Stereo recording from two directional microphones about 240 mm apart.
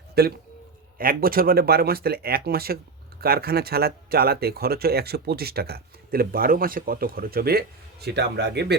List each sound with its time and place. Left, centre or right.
0.1 s speech: right